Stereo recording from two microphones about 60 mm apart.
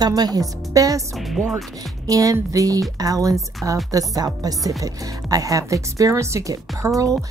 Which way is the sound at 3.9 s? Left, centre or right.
Right.